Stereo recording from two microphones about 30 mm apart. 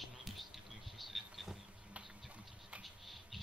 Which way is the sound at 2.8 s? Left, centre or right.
Centre.